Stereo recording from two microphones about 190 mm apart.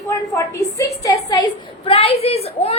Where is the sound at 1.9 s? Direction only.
30° left (ahead or behind).